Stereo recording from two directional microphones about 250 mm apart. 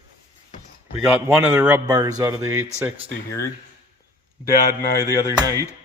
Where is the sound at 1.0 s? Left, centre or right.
Centre.